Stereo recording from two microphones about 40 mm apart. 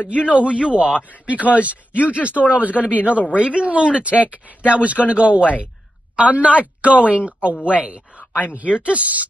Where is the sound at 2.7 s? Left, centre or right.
Left.